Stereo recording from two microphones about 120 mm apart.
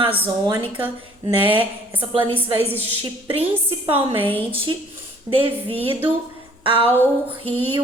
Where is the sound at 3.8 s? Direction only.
50° right (ahead or behind).